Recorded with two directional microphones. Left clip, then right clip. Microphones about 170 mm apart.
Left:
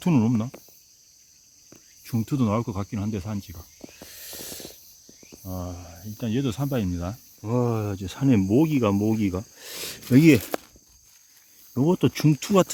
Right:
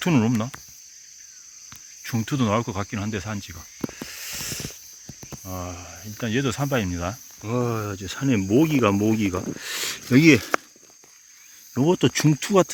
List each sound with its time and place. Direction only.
0.0 s speech: 10° left (ahead or behind)
2.0 s speech: 10° left (ahead or behind)
4.0 s a sound: 20° left (ahead or behind)
5.5 s speech: 20° left (ahead or behind); by 7.2 s centre (ahead or behind)
7.4 s speech: 35° left (ahead or behind)
8.5 s speech: 20° left (ahead or behind)
11.7 s speech: 5° left (ahead or behind)